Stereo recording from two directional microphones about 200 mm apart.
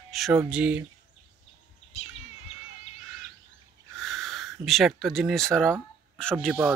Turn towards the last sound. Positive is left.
turn(degrees=-5)  # may be behind; listen again after turning